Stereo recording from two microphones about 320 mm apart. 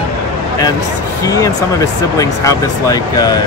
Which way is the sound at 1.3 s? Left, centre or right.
Centre.